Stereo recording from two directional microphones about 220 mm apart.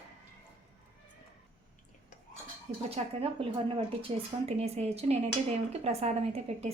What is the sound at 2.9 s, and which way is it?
Speech, 25° right (ahead or behind).